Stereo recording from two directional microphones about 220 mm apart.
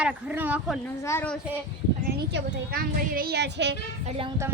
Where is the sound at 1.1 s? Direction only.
10° left (ahead or behind).